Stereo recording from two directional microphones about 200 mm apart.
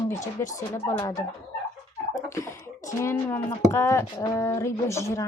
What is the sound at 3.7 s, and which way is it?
Speech, 15° left (ahead or behind).